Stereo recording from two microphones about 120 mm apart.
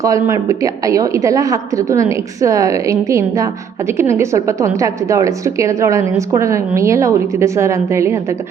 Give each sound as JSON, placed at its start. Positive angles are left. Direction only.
{"t": 0.0, "sound": "a woman's voice", "side_deg": -25}